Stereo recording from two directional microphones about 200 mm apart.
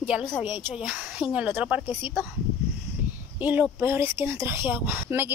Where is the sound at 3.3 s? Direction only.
10° right (ahead or behind).